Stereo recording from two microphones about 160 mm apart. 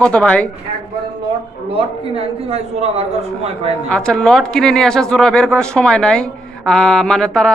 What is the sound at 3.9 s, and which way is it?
Speech, 5° left (ahead or behind).